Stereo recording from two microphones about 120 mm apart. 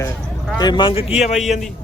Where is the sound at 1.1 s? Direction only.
70° left (ahead or behind).